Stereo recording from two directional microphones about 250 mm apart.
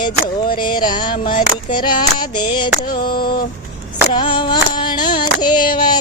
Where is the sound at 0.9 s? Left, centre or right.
Centre.